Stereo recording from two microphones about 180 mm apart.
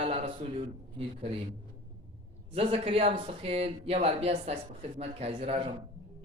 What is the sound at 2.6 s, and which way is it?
Speech, 30° right (ahead or behind).